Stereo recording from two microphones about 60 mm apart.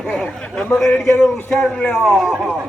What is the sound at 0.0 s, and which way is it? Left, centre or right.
A man's voice, centre.